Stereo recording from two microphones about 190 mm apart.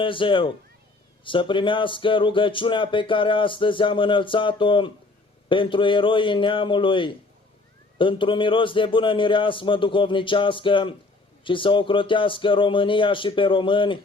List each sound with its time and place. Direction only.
0.0 s speech: 25° left (ahead or behind)